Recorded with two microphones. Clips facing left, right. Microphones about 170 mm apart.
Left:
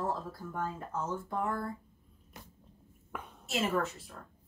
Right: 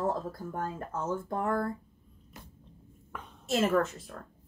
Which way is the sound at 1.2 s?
50° right (ahead or behind).